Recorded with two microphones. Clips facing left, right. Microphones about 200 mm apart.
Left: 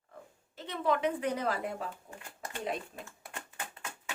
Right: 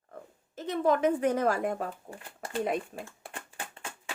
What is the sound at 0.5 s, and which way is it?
A woman's voice, 45° right (ahead or behind).